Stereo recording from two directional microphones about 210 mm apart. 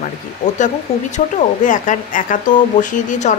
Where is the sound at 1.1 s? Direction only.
35° left (ahead or behind).